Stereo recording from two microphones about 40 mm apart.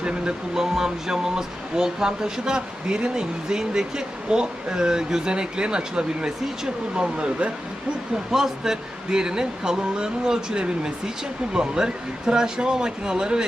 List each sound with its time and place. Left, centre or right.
0.0 s speech: right
0.6 s speech: centre; by 7.5 s right
8.3 s speech: centre